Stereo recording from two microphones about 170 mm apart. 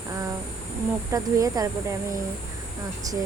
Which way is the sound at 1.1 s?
20° right (ahead or behind).